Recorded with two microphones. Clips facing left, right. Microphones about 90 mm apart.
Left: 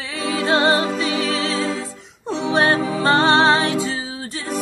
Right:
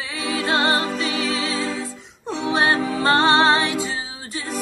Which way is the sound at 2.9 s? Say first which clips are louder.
Left 1 dB; 25° left (ahead or behind).